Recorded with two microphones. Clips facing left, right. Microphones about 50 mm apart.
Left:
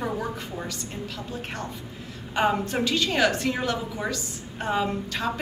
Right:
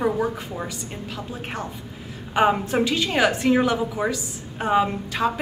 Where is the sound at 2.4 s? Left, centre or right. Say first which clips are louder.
Right 4 dB; centre.